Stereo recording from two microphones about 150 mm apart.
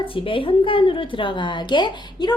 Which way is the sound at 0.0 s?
35° left (ahead or behind).